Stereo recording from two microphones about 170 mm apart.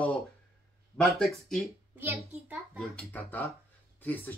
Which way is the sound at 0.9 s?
Centre (ahead or behind).